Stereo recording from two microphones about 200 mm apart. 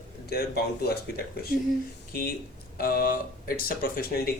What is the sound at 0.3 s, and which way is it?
Speech, 50° left (ahead or behind).